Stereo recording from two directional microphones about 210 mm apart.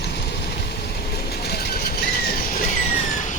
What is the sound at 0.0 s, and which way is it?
Vehicle, 55° left (ahead or behind).